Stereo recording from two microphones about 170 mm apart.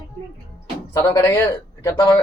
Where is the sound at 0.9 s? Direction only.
15° left (ahead or behind).